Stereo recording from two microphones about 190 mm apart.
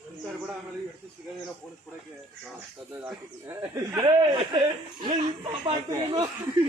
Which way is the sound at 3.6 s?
15° right (ahead or behind).